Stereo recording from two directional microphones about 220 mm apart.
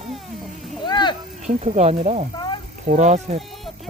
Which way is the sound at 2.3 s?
20° left (ahead or behind).